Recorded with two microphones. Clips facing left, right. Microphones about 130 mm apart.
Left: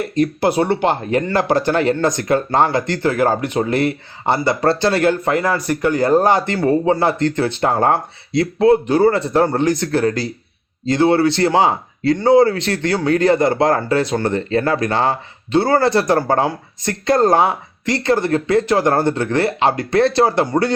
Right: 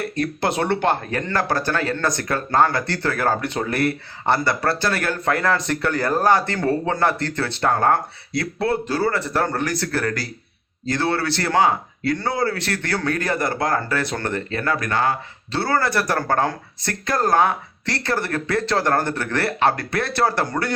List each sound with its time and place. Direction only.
0.1 s speech: 15° left (ahead or behind)
14.5 s speech: 30° left (ahead or behind)